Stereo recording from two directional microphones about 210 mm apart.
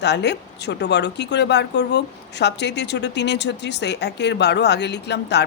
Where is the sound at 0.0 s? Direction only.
55° left (ahead or behind).